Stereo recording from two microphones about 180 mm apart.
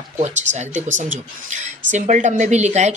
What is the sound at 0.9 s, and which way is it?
Speech, 45° right (ahead or behind).